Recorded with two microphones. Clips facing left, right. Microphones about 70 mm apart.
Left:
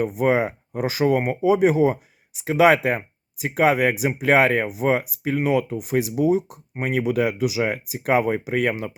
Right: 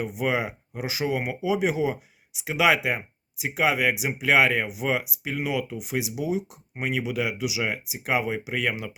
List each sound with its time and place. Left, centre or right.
0.0 s speech: left